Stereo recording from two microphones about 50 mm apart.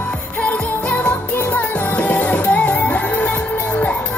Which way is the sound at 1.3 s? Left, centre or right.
Left.